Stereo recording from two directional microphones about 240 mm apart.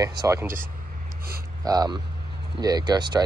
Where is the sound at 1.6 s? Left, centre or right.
Centre.